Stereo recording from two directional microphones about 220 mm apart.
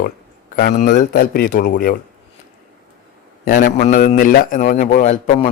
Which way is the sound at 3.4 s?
40° left (ahead or behind).